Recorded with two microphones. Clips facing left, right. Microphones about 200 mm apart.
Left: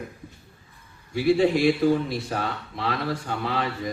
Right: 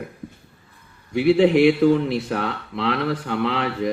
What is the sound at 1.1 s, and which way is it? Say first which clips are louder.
A man's voice: right 4 dB; 65° right (ahead or behind).